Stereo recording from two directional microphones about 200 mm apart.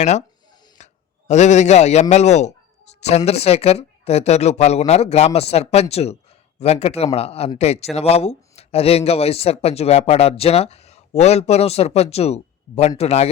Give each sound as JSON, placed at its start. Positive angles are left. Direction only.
{"t": 0.0, "sound": "speech", "side_deg": 35}
{"t": 0.8, "sound": "a sound", "side_deg": 35}
{"t": 1.3, "sound": "speech", "side_deg": 35}